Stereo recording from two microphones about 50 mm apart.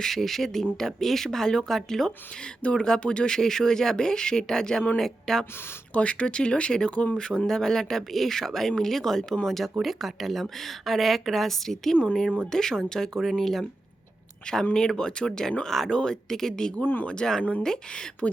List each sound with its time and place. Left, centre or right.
0.0 s speech: centre
5.9 s speech: left
9.8 s speech: centre
15.9 s speech: centre
16.8 s speech: left
17.1 s speech: centre